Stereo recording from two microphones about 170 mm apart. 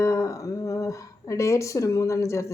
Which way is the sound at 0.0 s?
20° left (ahead or behind).